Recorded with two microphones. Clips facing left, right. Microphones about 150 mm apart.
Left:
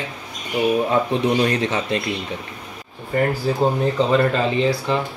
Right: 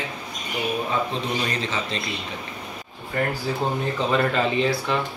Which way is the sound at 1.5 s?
60° left (ahead or behind).